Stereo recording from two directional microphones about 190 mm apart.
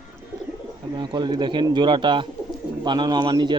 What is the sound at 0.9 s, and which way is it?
Speech, 25° right (ahead or behind).